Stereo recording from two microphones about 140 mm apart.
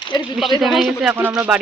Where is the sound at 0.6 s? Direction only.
Centre (ahead or behind).